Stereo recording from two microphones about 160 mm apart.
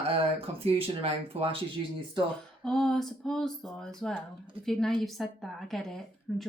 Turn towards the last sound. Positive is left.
turn(degrees=0)  # may be behind; listen again after turning